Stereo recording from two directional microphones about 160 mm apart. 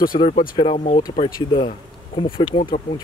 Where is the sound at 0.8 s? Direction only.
55° left (ahead or behind).